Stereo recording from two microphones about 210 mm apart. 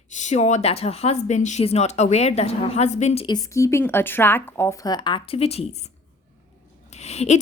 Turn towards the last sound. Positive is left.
turn(degrees=30)  # may be behind; listen again after turning